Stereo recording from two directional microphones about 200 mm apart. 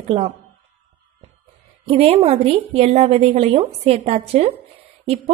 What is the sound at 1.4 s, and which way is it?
A woman's voice, 30° right (ahead or behind).